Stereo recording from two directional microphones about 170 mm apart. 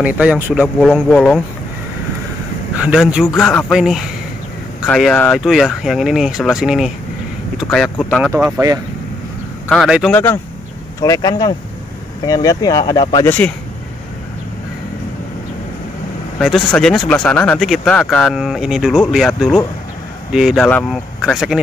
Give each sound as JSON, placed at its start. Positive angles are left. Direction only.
{"t": 0.0, "sound": "speech", "side_deg": -10}
{"t": 0.8, "sound": "speech", "side_deg": 5}
{"t": 2.8, "sound": "speech", "side_deg": -5}
{"t": 9.7, "sound": "speech", "side_deg": 0}
{"t": 10.1, "sound": "speech", "side_deg": 15}
{"t": 11.0, "sound": "speech", "side_deg": 25}
{"t": 16.3, "sound": "speech", "side_deg": 5}